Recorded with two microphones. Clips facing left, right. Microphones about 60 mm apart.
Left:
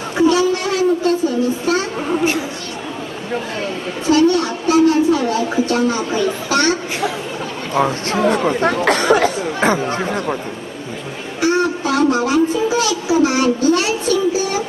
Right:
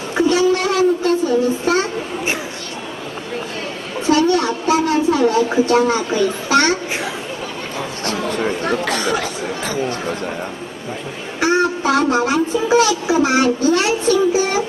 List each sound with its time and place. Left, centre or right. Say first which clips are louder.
0.2 s a sound: even; right
4.0 s a sound: left 1 dB; right
6.5 s speech: right 2 dB; right
7.8 s speech: left 8 dB; left
11.3 s music: even; right
12.6 s speech: right 3 dB; right